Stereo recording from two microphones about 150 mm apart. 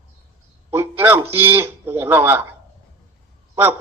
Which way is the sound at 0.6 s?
15° right (ahead or behind).